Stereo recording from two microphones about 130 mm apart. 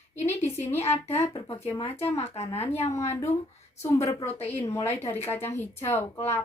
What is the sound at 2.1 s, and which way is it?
Speech, 55° left (ahead or behind).